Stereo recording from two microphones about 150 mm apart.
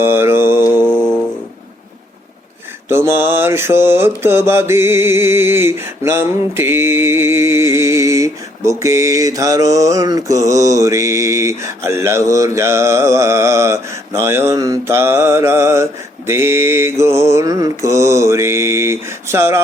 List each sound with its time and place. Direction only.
0.0 s mantra: 15° right (ahead or behind)
0.9 s music: 5° left (ahead or behind)
2.9 s mantra: 15° right (ahead or behind)